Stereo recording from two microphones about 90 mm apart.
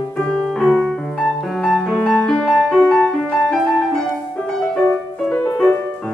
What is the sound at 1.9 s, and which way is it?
Music, 20° left (ahead or behind).